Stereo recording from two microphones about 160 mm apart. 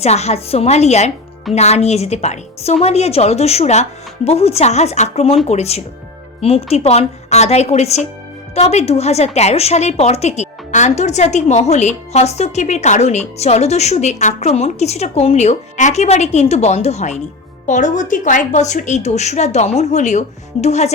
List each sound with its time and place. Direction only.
0.0 s a woman's voice: 45° left (ahead or behind)